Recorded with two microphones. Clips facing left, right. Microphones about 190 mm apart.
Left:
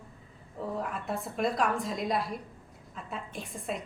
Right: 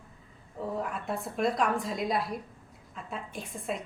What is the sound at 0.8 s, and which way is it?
A woman's voice, centre (ahead or behind).